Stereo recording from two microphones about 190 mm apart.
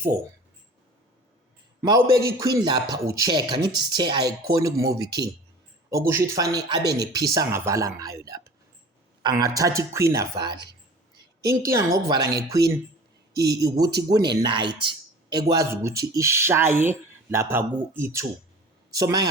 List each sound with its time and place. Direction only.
2.0 s speech: 15° right (ahead or behind)
11.6 s a man's voice: 15° right (ahead or behind)